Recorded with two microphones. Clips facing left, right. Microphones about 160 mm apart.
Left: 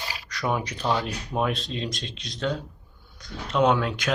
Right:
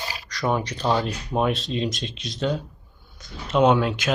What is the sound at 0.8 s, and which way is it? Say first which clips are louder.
Speech: right 3 dB; 10° right (ahead or behind).